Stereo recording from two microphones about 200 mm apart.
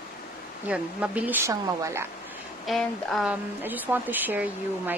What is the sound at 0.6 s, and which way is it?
Speech, 5° right (ahead or behind).